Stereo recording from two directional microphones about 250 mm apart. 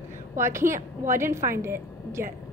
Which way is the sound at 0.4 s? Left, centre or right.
Centre.